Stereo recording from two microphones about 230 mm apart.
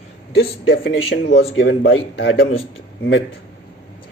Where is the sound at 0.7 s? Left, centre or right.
Left.